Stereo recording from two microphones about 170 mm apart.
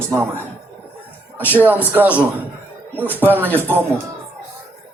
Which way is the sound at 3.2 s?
10° right (ahead or behind).